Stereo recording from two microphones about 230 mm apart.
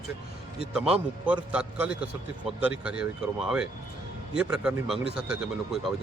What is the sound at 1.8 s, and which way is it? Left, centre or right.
Speech, centre.